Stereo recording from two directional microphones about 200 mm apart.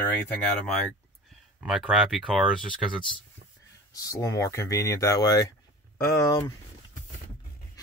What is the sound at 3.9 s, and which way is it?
Speech, 15° left (ahead or behind).